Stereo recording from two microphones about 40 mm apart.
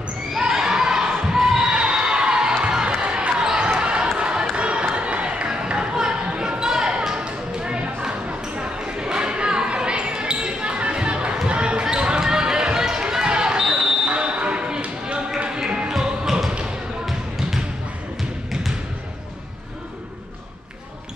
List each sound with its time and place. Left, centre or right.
0.4 s children shouting: centre
1.3 s basketball bounce: centre
4.2 s a sound: right
4.9 s music: right
6.6 s a sound: centre
11.4 s basketball bounce: right
16.0 s music: centre